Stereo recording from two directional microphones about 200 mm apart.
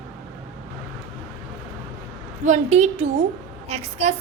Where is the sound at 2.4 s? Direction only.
35° right (ahead or behind).